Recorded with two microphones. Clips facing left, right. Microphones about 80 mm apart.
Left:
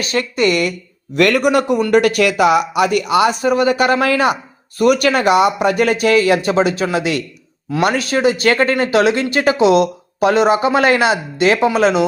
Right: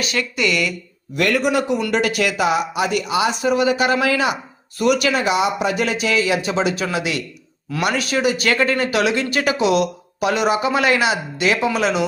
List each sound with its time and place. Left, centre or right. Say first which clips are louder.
0.0 s speech: left 5 dB; left
1.1 s a man's voice: left 5 dB; left